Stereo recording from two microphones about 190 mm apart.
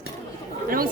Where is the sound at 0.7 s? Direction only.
50° right (ahead or behind).